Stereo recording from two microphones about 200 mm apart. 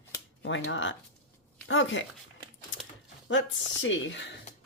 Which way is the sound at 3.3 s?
65° left (ahead or behind).